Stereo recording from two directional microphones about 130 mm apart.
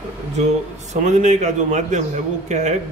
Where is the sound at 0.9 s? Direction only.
65° right (ahead or behind).